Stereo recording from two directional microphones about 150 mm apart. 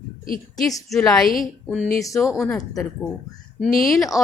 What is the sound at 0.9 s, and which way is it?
Speech, 5° left (ahead or behind).